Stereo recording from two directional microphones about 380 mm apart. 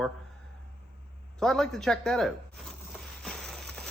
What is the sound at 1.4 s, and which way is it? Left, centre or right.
Speech, centre.